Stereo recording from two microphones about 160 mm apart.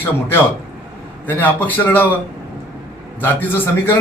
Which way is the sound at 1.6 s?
10° left (ahead or behind).